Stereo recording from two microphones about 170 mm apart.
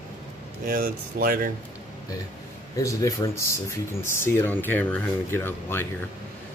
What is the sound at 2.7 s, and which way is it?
Speech, 20° left (ahead or behind).